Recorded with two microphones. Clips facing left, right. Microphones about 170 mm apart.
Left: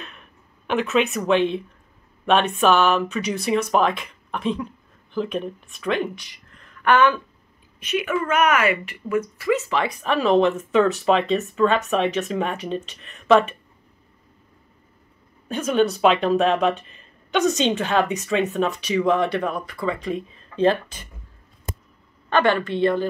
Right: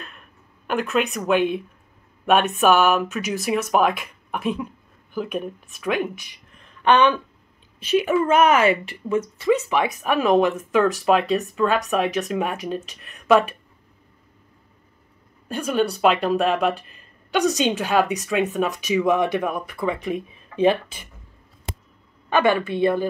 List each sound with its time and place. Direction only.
0.0 s a sound: 5° right (ahead or behind)
2.2 s speech: 5° right (ahead or behind); by 7.2 s 20° right (ahead or behind)
7.8 s a woman's voice: 30° right (ahead or behind)
9.4 s speech: 15° right (ahead or behind)
15.4 s speech: centre (ahead or behind)
22.3 s speech: 10° right (ahead or behind)